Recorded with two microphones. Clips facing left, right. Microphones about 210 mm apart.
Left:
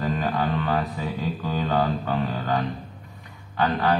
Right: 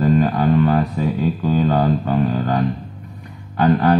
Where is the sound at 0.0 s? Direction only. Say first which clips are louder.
Right 9 dB; 40° right (ahead or behind).